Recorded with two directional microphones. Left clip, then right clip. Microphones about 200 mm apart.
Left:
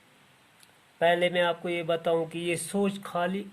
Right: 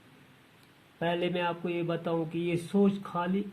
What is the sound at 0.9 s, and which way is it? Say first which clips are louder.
Speech: left 7 dB; 45° left (ahead or behind).